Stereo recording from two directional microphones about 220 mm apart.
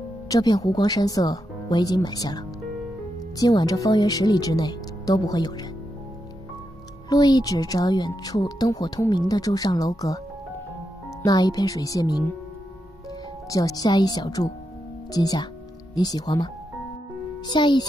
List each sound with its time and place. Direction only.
0.3 s speech: 15° left (ahead or behind)
7.1 s speech: 20° left (ahead or behind)
11.2 s speech: 15° left (ahead or behind)
13.5 s speech: 15° left (ahead or behind)
17.5 s a child's voice: 20° left (ahead or behind)